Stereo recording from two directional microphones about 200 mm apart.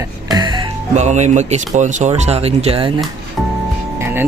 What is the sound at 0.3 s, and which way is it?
Music, 20° right (ahead or behind).